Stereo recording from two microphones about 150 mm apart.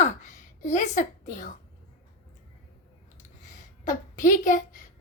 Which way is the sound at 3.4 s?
55° left (ahead or behind).